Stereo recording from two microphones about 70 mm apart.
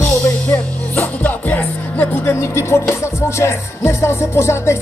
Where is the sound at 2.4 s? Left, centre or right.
Left.